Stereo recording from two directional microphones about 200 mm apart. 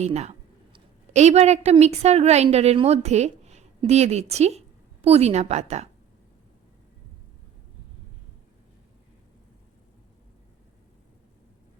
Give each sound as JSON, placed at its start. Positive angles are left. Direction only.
{"t": 0.0, "sound": "a woman's voice", "side_deg": -35}